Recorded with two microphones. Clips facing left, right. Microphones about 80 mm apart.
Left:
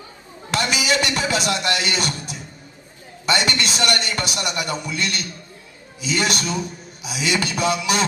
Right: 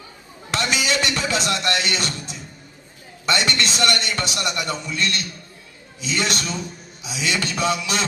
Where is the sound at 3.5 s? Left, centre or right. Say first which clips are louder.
Even; centre.